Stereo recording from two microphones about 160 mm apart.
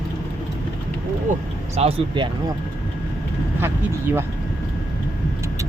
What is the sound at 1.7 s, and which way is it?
Speech, 40° right (ahead or behind).